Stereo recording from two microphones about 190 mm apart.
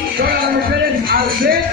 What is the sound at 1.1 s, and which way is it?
Music, 50° right (ahead or behind).